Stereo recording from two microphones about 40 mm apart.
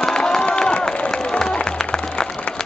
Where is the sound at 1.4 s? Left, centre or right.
Centre.